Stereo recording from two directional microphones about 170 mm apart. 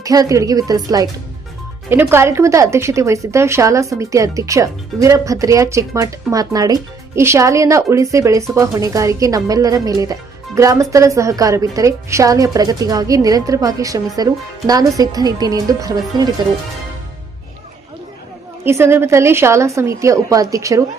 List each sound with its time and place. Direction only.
0.0 s a woman's voice: 20° right (ahead or behind)
18.6 s a woman's voice: 15° right (ahead or behind)